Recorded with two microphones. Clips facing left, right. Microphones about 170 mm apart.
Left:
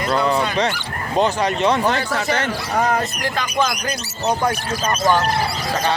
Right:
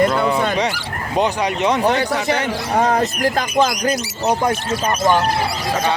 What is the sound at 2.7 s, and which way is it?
Speech, 30° right (ahead or behind).